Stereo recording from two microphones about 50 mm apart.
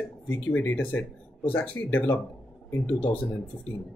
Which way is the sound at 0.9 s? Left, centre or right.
Left.